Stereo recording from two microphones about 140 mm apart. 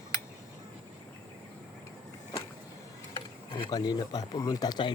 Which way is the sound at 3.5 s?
30° left (ahead or behind).